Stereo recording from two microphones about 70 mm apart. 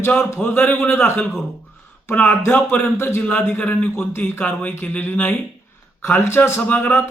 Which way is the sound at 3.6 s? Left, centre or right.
Left.